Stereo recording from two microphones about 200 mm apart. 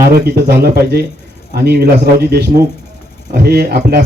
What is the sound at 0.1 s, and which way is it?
Speech, 50° right (ahead or behind).